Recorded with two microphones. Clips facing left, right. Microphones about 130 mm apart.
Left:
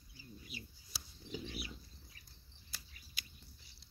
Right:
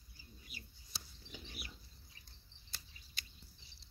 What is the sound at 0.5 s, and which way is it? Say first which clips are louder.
Chicken: left 6 dB; 45° right (ahead or behind).